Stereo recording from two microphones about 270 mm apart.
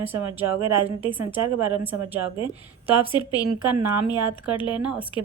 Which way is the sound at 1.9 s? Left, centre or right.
Right.